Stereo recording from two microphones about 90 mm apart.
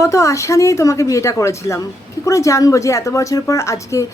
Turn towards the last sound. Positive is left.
turn(degrees=35)  # may be behind; listen again after turning